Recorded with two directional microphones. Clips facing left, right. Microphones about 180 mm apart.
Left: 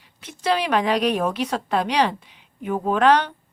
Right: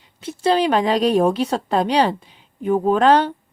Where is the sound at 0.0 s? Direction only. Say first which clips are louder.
Right 6 dB; 30° right (ahead or behind).